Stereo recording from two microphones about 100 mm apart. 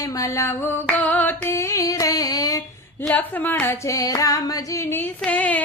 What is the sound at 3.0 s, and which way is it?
Female singing, 15° left (ahead or behind).